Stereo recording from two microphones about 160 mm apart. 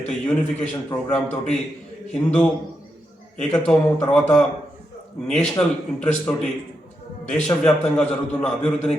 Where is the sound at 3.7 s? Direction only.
5° left (ahead or behind).